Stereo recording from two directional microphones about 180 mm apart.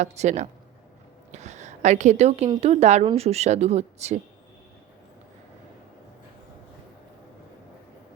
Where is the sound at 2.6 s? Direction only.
35° right (ahead or behind).